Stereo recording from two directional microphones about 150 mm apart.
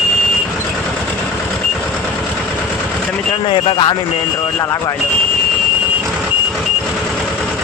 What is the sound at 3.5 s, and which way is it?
Speech, 35° left (ahead or behind).